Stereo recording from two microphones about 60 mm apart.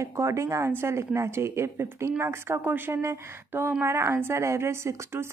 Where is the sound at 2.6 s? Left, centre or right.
Right.